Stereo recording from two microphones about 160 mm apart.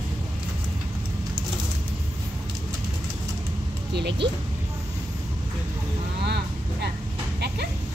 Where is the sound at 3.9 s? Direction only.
90° right.